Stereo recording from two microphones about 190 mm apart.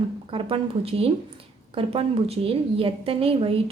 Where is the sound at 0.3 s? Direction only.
30° right (ahead or behind).